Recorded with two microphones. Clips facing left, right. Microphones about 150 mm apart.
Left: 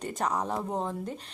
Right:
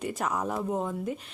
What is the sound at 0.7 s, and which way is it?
Speech, 30° left (ahead or behind).